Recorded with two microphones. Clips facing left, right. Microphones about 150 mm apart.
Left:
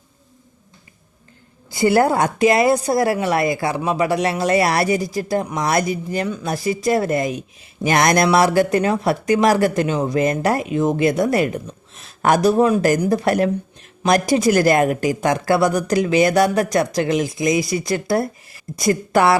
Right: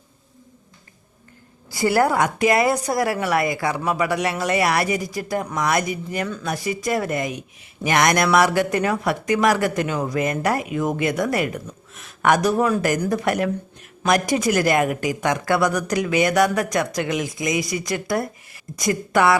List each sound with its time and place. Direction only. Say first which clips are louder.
1.7 s speech: left 3 dB; 20° left (ahead or behind)